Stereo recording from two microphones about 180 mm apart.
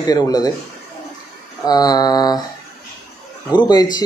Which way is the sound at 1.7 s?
20° left (ahead or behind).